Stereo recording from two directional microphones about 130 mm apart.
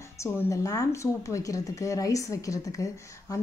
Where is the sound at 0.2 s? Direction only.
25° left (ahead or behind).